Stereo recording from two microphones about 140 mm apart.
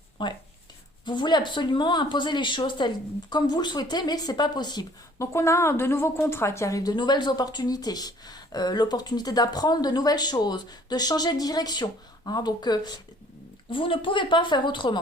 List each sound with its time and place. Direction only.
0.2 s a woman's voice: 35° left (ahead or behind)